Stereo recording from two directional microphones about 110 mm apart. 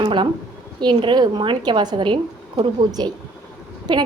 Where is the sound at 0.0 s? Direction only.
45° right (ahead or behind).